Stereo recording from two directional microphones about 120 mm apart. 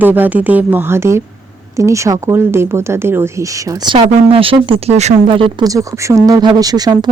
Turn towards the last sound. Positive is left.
turn(degrees=-35)  # may be behind; listen again after turning